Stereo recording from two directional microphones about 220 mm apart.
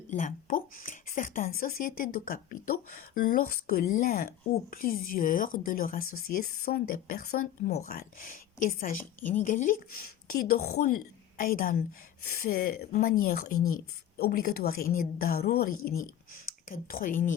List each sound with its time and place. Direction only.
0.1 s a woman's voice: 35° left (ahead or behind)